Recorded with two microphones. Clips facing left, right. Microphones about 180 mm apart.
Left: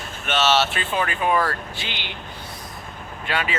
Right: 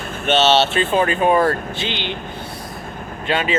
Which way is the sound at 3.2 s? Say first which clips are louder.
Right 7 dB; 25° right (ahead or behind).